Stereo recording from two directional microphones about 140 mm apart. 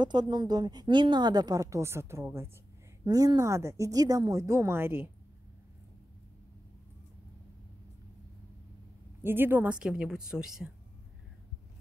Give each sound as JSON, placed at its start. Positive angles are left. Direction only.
{"t": 0.0, "sound": "a woman's voice", "side_deg": -30}
{"t": 9.2, "sound": "a woman's voice", "side_deg": -15}